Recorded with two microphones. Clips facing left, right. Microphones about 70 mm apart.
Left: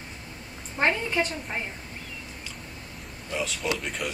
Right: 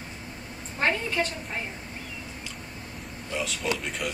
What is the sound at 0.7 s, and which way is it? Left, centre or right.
Speech, centre.